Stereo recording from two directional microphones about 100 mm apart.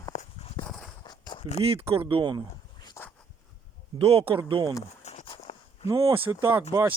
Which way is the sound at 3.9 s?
75° right (ahead or behind).